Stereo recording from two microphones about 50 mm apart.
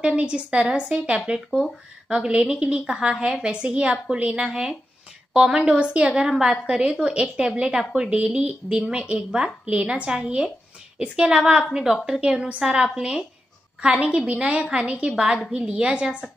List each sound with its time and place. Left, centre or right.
0.0 s a woman's voice: centre
4.5 s a woman's voice: centre